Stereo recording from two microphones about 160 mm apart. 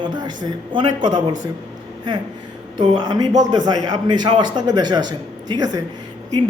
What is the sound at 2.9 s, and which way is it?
A man's voice, 25° right (ahead or behind).